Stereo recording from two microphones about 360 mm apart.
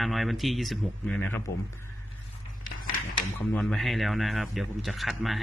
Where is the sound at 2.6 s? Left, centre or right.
Left.